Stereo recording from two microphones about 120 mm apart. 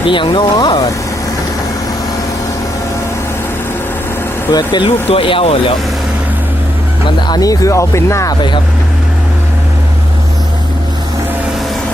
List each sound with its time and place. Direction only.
0.1 s speech: 40° left (ahead or behind)
4.5 s speech: 40° left (ahead or behind)
5.0 s speech: 50° left (ahead or behind)
7.3 s speech: 30° left (ahead or behind)